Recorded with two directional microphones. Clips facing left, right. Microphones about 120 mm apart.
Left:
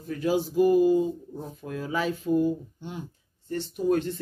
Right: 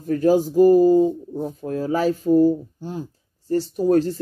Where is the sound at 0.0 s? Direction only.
45° right (ahead or behind).